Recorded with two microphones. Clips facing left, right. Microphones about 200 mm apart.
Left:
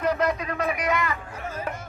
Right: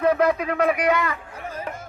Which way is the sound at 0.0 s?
60° right (ahead or behind).